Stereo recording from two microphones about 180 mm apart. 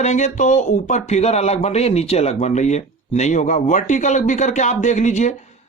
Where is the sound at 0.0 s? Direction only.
40° left (ahead or behind).